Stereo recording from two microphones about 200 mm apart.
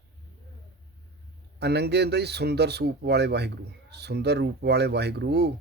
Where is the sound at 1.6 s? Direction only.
55° right (ahead or behind).